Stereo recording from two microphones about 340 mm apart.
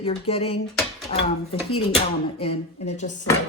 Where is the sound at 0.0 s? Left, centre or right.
Centre.